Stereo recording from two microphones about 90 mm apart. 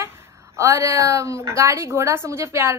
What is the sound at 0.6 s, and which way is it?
A woman's voice, 35° right (ahead or behind).